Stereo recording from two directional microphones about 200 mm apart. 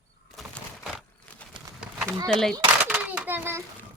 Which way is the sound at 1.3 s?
5° left (ahead or behind).